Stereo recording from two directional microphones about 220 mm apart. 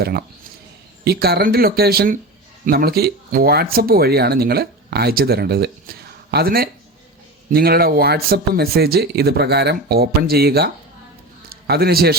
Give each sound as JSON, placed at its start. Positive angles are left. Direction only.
{"t": 0.0, "sound": "speech", "side_deg": -45}